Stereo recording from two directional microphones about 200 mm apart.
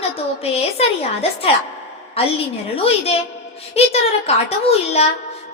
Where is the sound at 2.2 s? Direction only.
30° left (ahead or behind).